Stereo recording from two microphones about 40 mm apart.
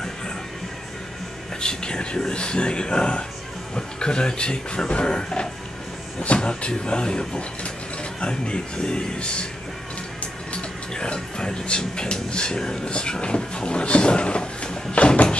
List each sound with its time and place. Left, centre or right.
1.6 s speech: centre
10.5 s speech: left